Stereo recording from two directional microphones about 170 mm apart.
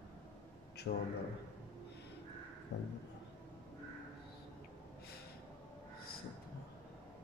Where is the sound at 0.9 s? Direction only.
90° left.